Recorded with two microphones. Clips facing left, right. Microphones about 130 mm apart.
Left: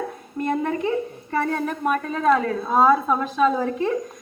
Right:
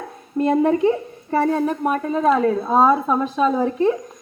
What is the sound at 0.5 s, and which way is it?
A woman's voice, 20° right (ahead or behind).